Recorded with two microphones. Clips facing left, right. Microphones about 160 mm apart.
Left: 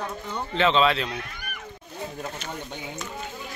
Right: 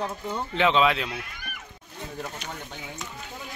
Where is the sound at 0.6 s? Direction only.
10° right (ahead or behind).